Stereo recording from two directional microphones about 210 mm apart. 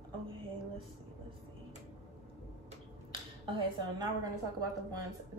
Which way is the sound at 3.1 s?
25° right (ahead or behind).